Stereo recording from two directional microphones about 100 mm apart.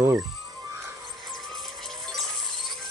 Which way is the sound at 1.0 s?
Centre (ahead or behind).